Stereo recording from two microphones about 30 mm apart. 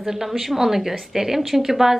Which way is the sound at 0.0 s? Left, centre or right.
Centre.